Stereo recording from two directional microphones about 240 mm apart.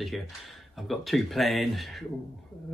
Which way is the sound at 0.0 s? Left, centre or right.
Centre.